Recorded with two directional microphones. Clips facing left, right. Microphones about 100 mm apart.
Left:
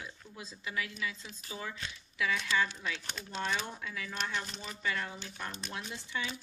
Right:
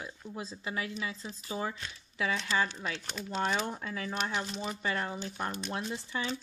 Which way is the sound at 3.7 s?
40° right (ahead or behind).